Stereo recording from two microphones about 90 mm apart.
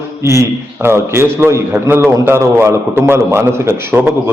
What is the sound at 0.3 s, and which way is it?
A man's voice, 30° right (ahead or behind).